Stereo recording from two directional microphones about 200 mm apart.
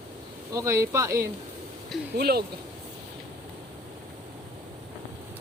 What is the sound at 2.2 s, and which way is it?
Speech, 50° right (ahead or behind).